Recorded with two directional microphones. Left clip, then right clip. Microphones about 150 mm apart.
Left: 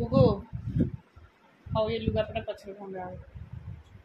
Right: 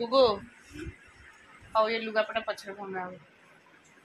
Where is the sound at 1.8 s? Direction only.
10° left (ahead or behind).